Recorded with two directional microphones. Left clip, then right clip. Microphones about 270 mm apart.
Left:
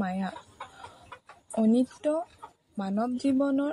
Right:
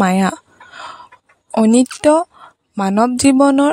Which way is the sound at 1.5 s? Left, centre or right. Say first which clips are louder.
Right 13 dB; right.